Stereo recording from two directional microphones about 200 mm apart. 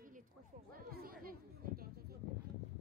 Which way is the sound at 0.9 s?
50° right (ahead or behind).